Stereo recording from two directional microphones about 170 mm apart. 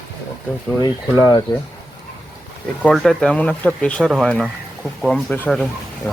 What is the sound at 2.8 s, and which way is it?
Speech, centre (ahead or behind).